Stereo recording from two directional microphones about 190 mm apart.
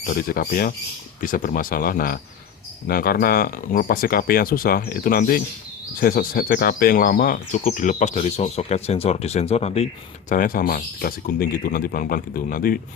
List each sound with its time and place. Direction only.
0.0 s speech: 50° left (ahead or behind); by 9.8 s 35° left (ahead or behind)
10.2 s speech: 45° left (ahead or behind)